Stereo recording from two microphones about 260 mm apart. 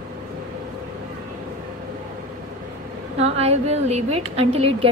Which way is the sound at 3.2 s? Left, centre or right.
Right.